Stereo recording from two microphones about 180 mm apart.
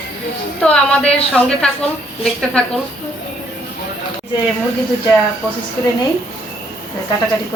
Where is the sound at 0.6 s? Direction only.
5° left (ahead or behind).